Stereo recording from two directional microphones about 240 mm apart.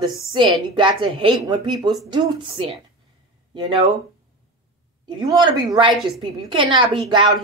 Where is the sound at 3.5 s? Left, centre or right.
Centre.